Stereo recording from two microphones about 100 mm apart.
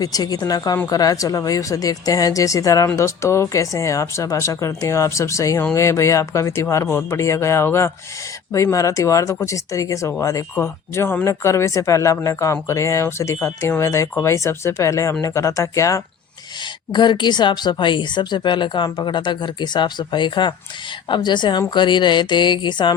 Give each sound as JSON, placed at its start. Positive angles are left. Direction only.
{"t": 0.0, "sound": "speech", "side_deg": 40}
{"t": 16.9, "sound": "speech", "side_deg": 50}